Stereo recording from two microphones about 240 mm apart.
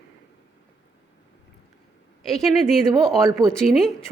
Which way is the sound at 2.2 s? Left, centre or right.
Centre.